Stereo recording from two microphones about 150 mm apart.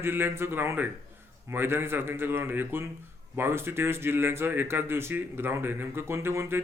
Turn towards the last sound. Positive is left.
turn(degrees=-15)  # may be behind; listen again after turning